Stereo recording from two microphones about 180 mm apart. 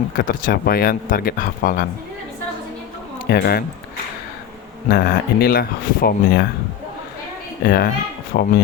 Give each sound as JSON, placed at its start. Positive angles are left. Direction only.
{"t": 0.2, "sound": "speech", "side_deg": 55}
{"t": 3.2, "sound": "speech", "side_deg": 65}
{"t": 4.9, "sound": "speech", "side_deg": 60}
{"t": 7.6, "sound": "speech", "side_deg": 60}